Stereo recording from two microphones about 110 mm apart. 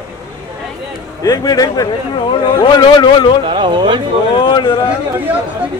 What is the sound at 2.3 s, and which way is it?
A man's voice, 45° left (ahead or behind).